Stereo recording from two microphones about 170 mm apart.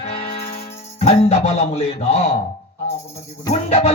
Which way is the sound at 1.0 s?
35° left (ahead or behind).